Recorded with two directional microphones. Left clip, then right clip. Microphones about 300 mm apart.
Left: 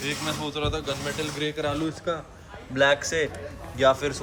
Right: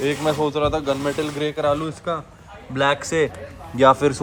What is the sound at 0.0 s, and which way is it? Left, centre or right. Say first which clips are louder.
Speech: right 9 dB; centre.